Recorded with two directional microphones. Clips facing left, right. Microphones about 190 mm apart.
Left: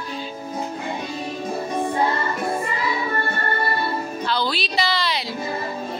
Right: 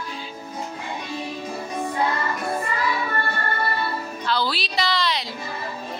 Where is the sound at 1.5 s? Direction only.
30° left (ahead or behind).